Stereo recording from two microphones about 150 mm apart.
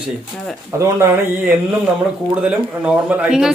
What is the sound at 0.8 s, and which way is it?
Speech, 15° right (ahead or behind).